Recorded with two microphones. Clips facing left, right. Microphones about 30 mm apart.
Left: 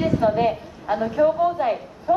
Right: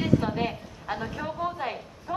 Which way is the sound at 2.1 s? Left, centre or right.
Centre.